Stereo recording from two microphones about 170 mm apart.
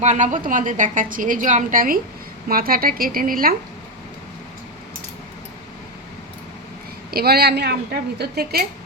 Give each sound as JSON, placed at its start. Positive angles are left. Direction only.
{"t": 0.0, "sound": "a woman's voice", "side_deg": -45}
{"t": 7.1, "sound": "a woman's voice", "side_deg": -65}